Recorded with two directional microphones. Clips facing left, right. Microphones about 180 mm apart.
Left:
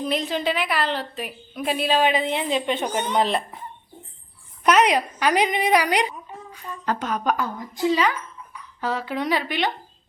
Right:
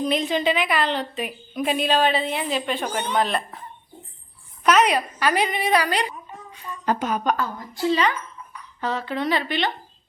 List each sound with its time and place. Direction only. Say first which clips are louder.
0.0 s a woman's voice: right 2 dB; centre (ahead or behind); by 3.4 s 25° left (ahead or behind)
4.6 s a woman's voice: even; 15° left (ahead or behind)
6.8 s a woman's voice: right 2 dB; 10° right (ahead or behind)
7.3 s a woman's voice: even; 15° left (ahead or behind)